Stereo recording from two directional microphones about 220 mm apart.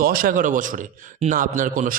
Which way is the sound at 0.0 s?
40° right (ahead or behind).